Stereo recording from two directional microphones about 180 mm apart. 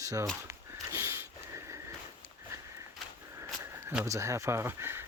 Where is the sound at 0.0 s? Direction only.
20° right (ahead or behind).